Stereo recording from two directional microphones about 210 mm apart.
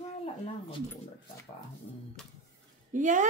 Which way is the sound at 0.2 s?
25° left (ahead or behind).